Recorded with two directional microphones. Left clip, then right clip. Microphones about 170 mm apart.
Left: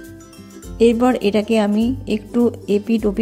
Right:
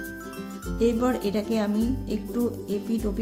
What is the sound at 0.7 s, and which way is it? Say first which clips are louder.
A woman's voice: left 9 dB; 40° left (ahead or behind).